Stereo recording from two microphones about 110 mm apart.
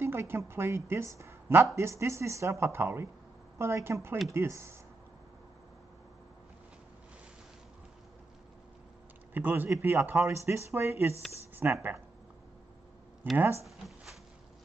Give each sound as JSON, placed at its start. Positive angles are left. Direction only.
{"t": 0.0, "sound": "speech", "side_deg": -20}
{"t": 9.3, "sound": "speech", "side_deg": -20}
{"t": 13.7, "sound": "a sound", "side_deg": 0}